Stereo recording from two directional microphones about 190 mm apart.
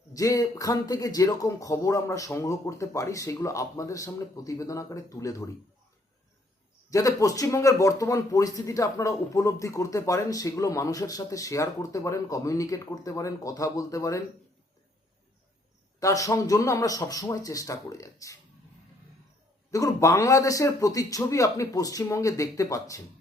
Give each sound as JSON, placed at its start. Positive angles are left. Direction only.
{"t": 0.1, "sound": "speech", "side_deg": 20}
{"t": 6.9, "sound": "speech", "side_deg": 15}
{"t": 16.0, "sound": "speech", "side_deg": 15}
{"t": 19.7, "sound": "speech", "side_deg": 15}